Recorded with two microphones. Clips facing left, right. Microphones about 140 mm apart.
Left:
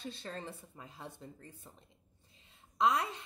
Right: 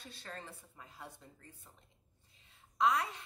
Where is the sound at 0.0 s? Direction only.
25° left (ahead or behind).